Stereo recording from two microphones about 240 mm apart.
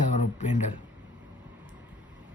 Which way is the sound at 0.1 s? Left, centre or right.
Left.